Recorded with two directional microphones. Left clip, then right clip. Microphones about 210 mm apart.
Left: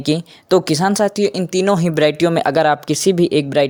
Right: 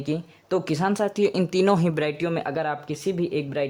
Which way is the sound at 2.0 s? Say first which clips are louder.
Left 11 dB; 35° left (ahead or behind).